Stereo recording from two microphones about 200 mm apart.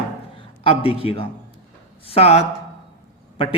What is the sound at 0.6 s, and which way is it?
A man's voice, 25° left (ahead or behind).